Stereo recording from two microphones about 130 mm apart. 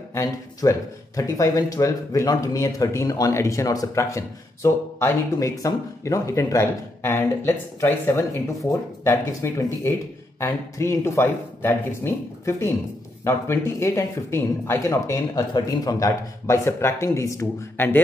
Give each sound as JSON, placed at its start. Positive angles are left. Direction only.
{"t": 0.1, "sound": "speech", "side_deg": 25}
{"t": 9.0, "sound": "speech", "side_deg": 20}